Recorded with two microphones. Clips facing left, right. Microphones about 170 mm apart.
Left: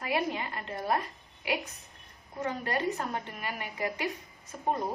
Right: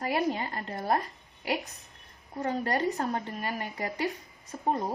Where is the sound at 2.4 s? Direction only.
35° right (ahead or behind).